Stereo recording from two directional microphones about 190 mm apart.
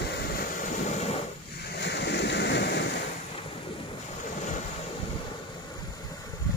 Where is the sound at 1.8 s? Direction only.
65° left (ahead or behind).